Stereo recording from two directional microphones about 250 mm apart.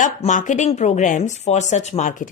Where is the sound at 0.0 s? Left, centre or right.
Left.